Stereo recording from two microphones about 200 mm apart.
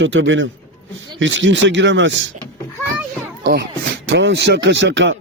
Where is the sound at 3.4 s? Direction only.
55° right (ahead or behind).